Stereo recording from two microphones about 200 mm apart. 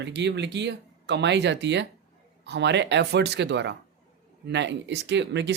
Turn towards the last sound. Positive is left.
turn(degrees=-60)  # may be behind; listen again after turning